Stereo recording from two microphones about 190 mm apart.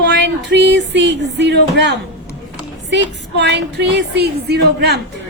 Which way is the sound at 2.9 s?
65° right (ahead or behind).